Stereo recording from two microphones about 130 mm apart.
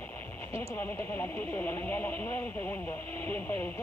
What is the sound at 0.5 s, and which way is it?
Speech, 20° left (ahead or behind).